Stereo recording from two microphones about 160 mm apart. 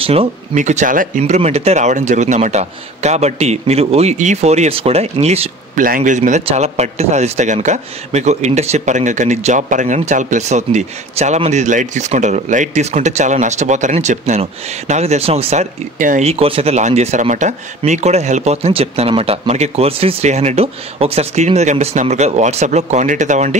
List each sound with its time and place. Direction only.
0.0 s speech: 40° right (ahead or behind)
5.8 s speech: 55° right (ahead or behind)
16.3 s speech: 35° right (ahead or behind)